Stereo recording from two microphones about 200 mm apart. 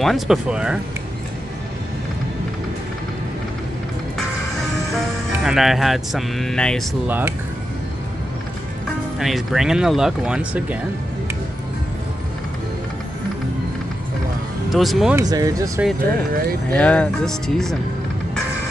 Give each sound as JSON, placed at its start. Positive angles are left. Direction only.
{"t": 0.0, "sound": "speech", "side_deg": 0}
{"t": 5.4, "sound": "speech", "side_deg": 0}
{"t": 7.1, "sound": "speech", "side_deg": -10}
{"t": 9.2, "sound": "speech", "side_deg": 0}
{"t": 14.7, "sound": "speech", "side_deg": 0}
{"t": 15.1, "sound": "speech", "side_deg": -20}
{"t": 16.7, "sound": "speech", "side_deg": 5}